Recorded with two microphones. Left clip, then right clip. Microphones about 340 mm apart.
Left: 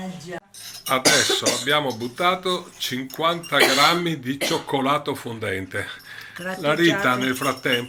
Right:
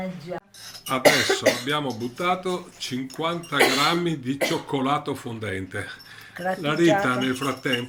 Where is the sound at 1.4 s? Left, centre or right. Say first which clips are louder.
Right 1 dB; right.